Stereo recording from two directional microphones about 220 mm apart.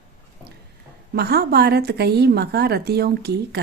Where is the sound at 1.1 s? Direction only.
45° right (ahead or behind).